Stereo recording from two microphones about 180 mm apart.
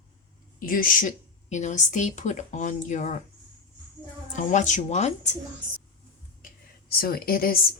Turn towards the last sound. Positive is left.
turn(degrees=55)  # may be behind; listen again after turning